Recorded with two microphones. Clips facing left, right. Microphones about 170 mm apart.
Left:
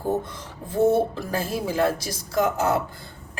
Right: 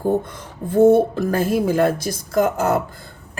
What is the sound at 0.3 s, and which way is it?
A man's voice, 55° right (ahead or behind).